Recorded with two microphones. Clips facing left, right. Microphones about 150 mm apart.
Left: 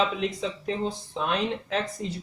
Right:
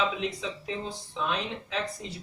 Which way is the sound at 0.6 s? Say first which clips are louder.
Left 6 dB; 50° left (ahead or behind).